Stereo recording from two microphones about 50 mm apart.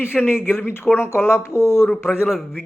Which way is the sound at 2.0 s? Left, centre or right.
Left.